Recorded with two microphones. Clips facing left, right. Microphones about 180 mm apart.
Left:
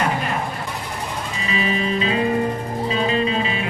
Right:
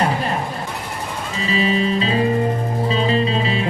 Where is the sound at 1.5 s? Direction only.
35° right (ahead or behind).